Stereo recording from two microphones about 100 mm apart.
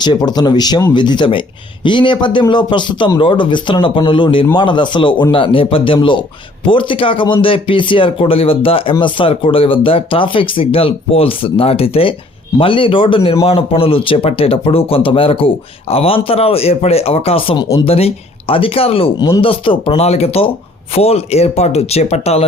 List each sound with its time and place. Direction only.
0.0 s speech: 45° left (ahead or behind); by 12.1 s 75° left (ahead or behind)
12.5 s speech: 60° left (ahead or behind)
17.8 s speech: 80° left
19.2 s speech: 60° left (ahead or behind); by 22.4 s 90° left